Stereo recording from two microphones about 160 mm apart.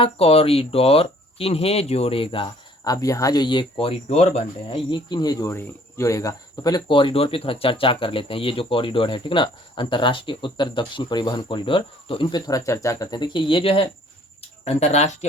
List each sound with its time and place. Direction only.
0.0 s speech: 35° left (ahead or behind)